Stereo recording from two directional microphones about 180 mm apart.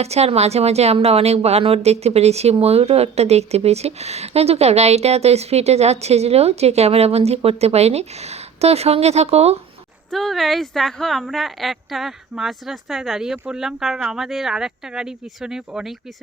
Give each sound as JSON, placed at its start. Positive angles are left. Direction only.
{"t": 0.0, "sound": "speech", "side_deg": -35}
{"t": 10.1, "sound": "a woman's voice", "side_deg": 0}